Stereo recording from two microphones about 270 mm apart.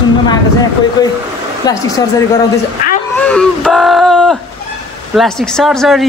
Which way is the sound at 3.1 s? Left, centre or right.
Centre.